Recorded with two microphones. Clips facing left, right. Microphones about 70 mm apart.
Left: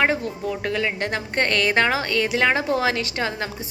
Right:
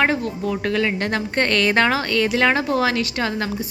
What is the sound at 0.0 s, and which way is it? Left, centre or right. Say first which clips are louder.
A woman's voice: right 2 dB; centre.